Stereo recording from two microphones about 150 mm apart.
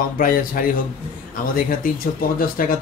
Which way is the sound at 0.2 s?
70° left (ahead or behind).